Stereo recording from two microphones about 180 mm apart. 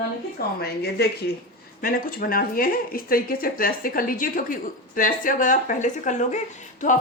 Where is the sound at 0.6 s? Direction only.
65° left (ahead or behind).